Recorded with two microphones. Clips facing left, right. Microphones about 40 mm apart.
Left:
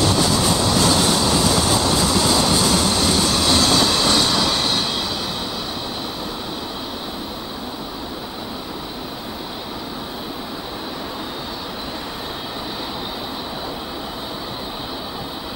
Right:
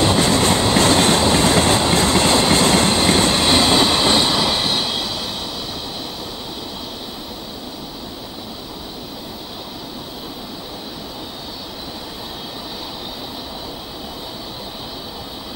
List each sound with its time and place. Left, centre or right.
0.0 s train: right; by 5.0 s centre